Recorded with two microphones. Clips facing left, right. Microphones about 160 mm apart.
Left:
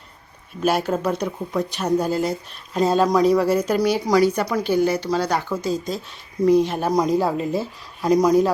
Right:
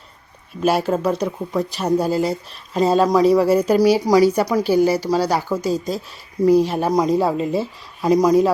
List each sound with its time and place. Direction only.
0.6 s speech: centre (ahead or behind)
5.6 s speech: 40° right (ahead or behind)
6.4 s speech: 5° right (ahead or behind)